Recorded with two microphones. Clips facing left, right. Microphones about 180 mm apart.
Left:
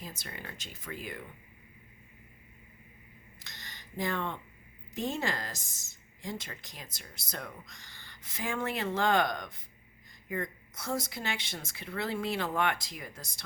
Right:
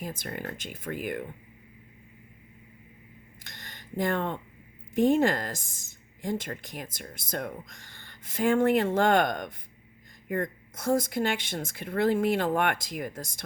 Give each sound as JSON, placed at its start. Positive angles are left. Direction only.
{"t": 0.0, "sound": "speech", "side_deg": -55}
{"t": 3.4, "sound": "a sound", "side_deg": -55}
{"t": 4.9, "sound": "speech", "side_deg": -55}